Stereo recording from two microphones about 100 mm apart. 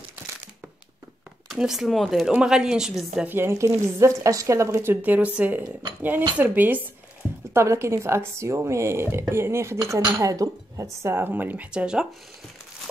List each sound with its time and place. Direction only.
1.5 s a woman's voice: 5° right (ahead or behind)
3.3 s a woman's voice: 25° right (ahead or behind)